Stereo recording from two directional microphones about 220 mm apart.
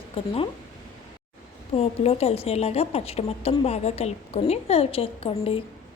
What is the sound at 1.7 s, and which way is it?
Speech, 25° left (ahead or behind).